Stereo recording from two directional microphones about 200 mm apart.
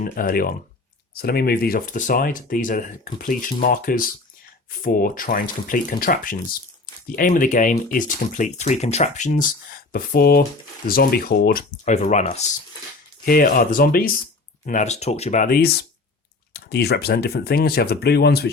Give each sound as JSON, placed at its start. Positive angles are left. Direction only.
{"t": 0.0, "sound": "speech", "side_deg": 45}
{"t": 13.2, "sound": "speech", "side_deg": 45}